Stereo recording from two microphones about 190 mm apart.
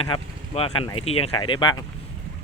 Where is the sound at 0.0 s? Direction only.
30° left (ahead or behind).